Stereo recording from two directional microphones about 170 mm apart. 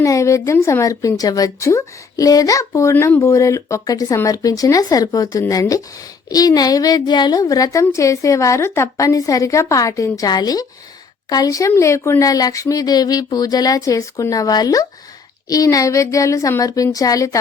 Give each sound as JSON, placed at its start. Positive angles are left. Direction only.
{"t": 0.0, "sound": "a woman's voice", "side_deg": 20}